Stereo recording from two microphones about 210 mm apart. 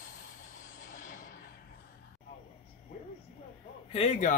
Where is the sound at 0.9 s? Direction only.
40° left (ahead or behind).